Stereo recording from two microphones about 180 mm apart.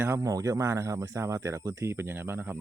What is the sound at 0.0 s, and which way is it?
Speech, 15° right (ahead or behind).